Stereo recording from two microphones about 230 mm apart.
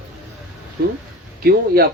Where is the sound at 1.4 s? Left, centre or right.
Right.